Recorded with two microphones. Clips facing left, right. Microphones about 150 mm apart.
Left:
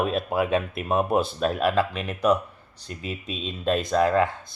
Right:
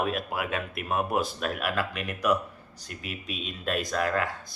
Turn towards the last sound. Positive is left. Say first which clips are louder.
# left 7 dB
turn(degrees=25)  # may be behind; listen again after turning